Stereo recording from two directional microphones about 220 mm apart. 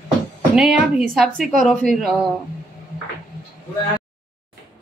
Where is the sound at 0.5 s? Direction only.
5° right (ahead or behind).